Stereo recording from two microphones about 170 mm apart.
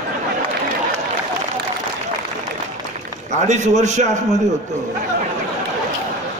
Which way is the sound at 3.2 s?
45° right (ahead or behind).